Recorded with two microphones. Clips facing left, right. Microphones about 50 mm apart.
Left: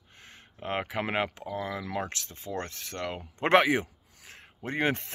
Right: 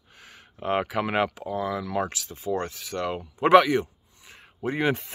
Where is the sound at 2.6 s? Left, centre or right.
Centre.